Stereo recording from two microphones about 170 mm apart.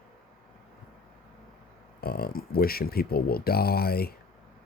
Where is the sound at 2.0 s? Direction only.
65° left (ahead or behind).